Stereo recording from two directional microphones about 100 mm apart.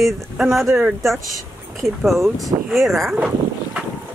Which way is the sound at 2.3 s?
Centre (ahead or behind).